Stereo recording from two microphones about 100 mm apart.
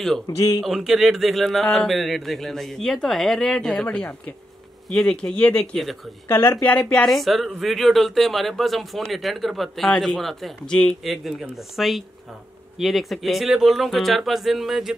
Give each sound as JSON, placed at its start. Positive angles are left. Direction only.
{"t": 0.3, "sound": "a man's voice", "side_deg": 45}
{"t": 0.7, "sound": "speech", "side_deg": -5}
{"t": 6.2, "sound": "speech", "side_deg": 25}